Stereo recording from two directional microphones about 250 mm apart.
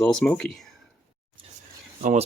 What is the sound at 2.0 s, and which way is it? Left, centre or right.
Speech, right.